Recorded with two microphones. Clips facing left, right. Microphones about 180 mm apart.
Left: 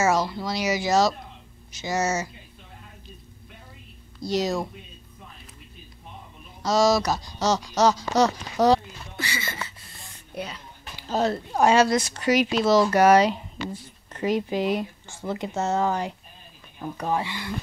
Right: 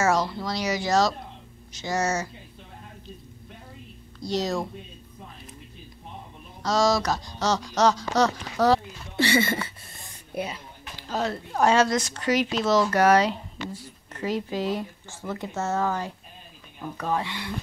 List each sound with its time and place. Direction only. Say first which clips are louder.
0.0 s speech: left 1 dB; 5° left (ahead or behind)
4.3 s speech: left 2 dB; 5° left (ahead or behind)
6.6 s speech: left 2 dB; 5° left (ahead or behind)
9.3 s speech: right 14 dB; 55° right (ahead or behind)
10.3 s speech: right 3 dB; 10° right (ahead or behind)
11.1 s speech: left 4 dB; 35° left (ahead or behind)
11.5 s speech: left 1 dB; 10° left (ahead or behind)
17.3 s speech: left 1 dB; centre (ahead or behind)